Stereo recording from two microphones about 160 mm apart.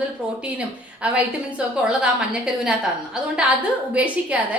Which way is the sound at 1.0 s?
5° right (ahead or behind).